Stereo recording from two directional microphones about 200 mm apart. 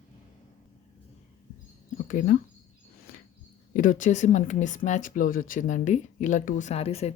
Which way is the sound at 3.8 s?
40° left (ahead or behind).